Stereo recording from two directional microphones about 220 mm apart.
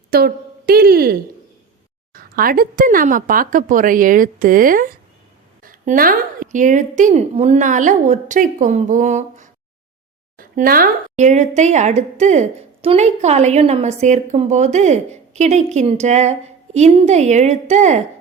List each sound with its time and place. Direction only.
0.1 s a woman's voice: 45° right (ahead or behind)